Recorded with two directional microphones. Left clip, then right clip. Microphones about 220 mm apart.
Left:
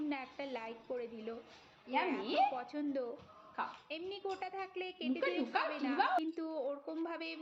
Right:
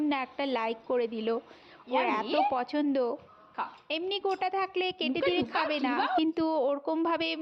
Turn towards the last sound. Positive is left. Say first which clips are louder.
# right 13 dB
turn(degrees=-45)  # may be behind; listen again after turning